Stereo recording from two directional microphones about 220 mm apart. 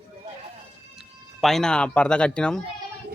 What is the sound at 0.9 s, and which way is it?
Speech, centre (ahead or behind).